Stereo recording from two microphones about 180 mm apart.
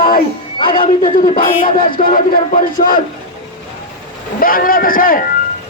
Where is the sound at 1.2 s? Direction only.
50° left (ahead or behind).